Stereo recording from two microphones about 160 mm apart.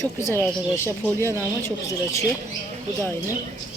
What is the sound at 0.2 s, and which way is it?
Speech, 15° left (ahead or behind).